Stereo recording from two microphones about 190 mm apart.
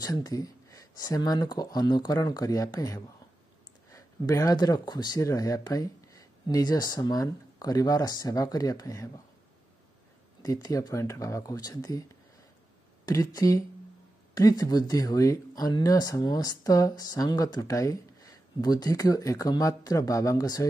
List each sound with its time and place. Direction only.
0.0 s speech: 20° left (ahead or behind)
10.4 s speech: 20° left (ahead or behind)